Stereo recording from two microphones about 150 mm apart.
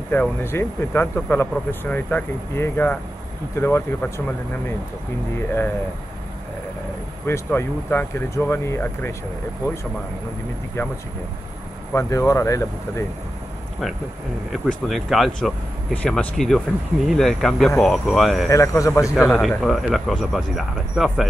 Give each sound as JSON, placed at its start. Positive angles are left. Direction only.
{"t": 0.1, "sound": "speech", "side_deg": 15}
{"t": 7.2, "sound": "speech", "side_deg": 15}
{"t": 11.9, "sound": "speech", "side_deg": 20}
{"t": 14.5, "sound": "speech", "side_deg": 0}
{"t": 18.5, "sound": "speech", "side_deg": 20}
{"t": 19.3, "sound": "speech", "side_deg": 5}